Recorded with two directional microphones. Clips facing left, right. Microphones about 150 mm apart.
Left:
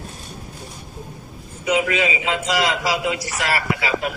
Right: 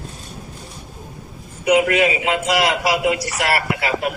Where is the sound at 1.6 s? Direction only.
55° right (ahead or behind).